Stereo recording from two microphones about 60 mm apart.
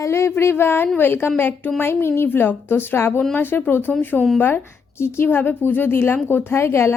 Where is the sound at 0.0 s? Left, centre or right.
Left.